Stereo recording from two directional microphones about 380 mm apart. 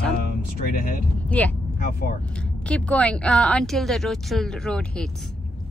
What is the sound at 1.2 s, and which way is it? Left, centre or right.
Speech, centre.